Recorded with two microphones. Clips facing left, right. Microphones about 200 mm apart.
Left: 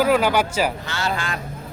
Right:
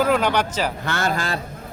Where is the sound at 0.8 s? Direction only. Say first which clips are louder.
Right 3 dB; 50° right (ahead or behind).